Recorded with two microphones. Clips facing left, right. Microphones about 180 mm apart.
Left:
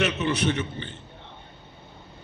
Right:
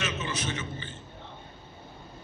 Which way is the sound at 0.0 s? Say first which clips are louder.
Left 9 dB; 65° left (ahead or behind).